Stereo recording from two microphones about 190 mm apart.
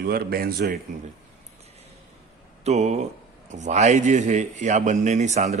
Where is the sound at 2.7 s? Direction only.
35° right (ahead or behind).